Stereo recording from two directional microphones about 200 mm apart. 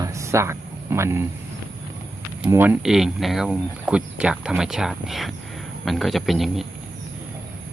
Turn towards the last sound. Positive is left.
turn(degrees=0)  # may be behind; listen again after turning